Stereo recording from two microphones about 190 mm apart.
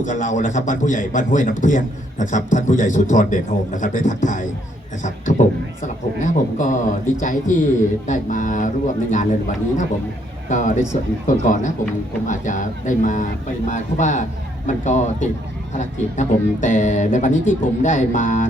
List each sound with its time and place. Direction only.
0.0 s a man's voice: 40° left (ahead or behind)